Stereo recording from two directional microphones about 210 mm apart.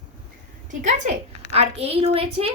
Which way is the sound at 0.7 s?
35° right (ahead or behind).